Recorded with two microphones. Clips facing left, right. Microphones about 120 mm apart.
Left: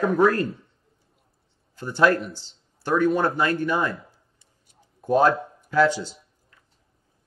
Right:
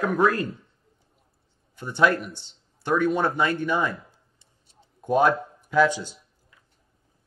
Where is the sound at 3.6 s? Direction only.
15° right (ahead or behind).